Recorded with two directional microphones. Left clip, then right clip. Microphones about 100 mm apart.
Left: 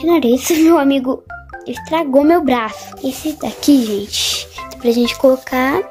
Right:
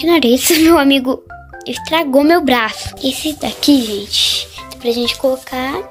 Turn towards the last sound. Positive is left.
turn(degrees=75)  # may be behind; listen again after turning